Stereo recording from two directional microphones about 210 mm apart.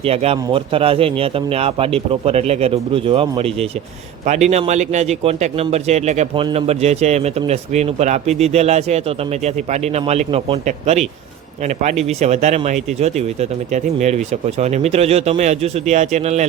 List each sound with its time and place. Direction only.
0.0 s speech: 30° right (ahead or behind)